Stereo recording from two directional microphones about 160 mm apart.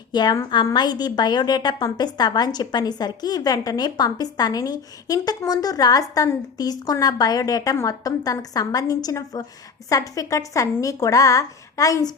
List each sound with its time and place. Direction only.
0.1 s a woman's voice: 25° left (ahead or behind)